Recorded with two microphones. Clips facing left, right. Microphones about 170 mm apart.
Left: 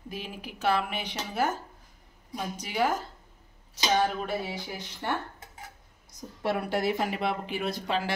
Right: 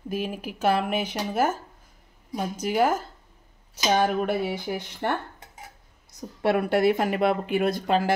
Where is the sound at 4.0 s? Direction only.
55° right (ahead or behind).